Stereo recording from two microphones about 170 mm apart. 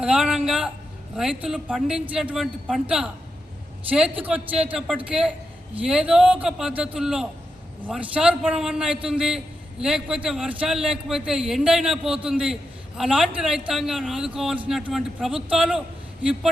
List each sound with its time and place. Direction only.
0.0 s a man's voice: 5° right (ahead or behind)